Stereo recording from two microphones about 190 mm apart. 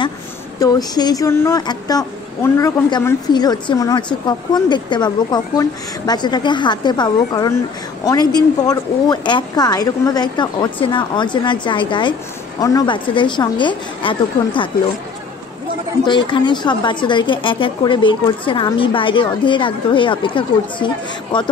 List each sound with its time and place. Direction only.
0.6 s speech: 20° left (ahead or behind)
16.1 s speech: 25° left (ahead or behind)